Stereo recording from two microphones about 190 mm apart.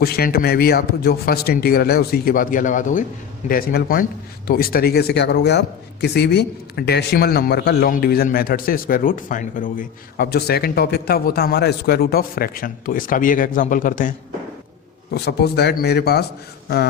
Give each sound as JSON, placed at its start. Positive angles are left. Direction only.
{"t": 0.0, "sound": "a man's voice", "side_deg": 55}
{"t": 15.1, "sound": "a man's voice", "side_deg": 55}